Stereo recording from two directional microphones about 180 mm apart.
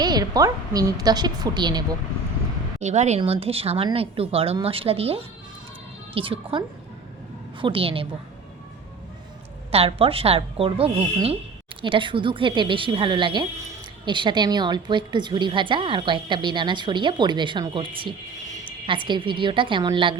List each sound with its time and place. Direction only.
0.0 s a woman's voice: 20° right (ahead or behind)
2.8 s a woman's voice: 40° right (ahead or behind)
9.7 s a woman's voice: 30° right (ahead or behind)